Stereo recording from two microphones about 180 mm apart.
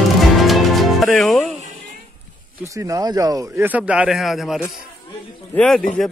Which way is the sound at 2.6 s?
15° right (ahead or behind).